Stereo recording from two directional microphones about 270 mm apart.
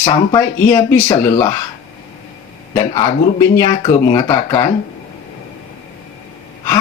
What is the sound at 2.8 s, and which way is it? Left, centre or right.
Speech, centre.